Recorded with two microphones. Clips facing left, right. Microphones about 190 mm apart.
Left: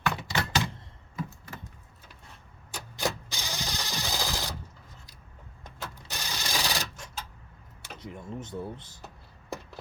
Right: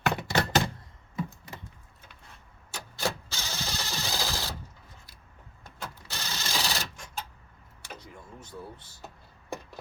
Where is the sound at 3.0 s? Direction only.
15° left (ahead or behind).